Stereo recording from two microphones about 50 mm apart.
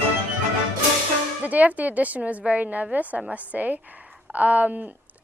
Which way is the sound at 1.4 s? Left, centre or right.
Right.